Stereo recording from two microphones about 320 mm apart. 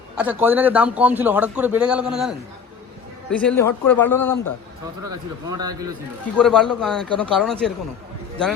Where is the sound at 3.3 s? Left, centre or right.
Centre.